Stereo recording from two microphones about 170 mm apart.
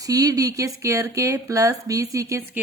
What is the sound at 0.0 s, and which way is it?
A woman's voice, 20° right (ahead or behind).